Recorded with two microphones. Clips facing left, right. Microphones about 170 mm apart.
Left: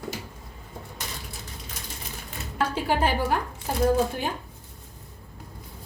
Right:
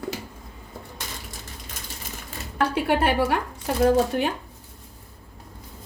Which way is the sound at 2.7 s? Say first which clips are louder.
Right 3 dB; 65° right (ahead or behind).